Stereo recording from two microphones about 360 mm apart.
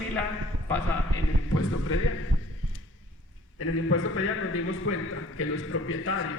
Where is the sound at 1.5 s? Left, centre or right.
Left.